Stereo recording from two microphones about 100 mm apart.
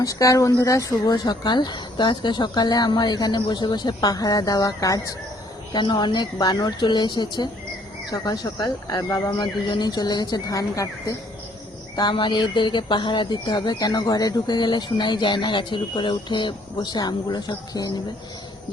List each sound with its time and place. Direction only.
0.0 s speech: 35° left (ahead or behind)
5.7 s speech: 50° left (ahead or behind); by 9.3 s 30° left (ahead or behind)
9.4 s speech: 50° left (ahead or behind)
11.9 s speech: 50° left (ahead or behind)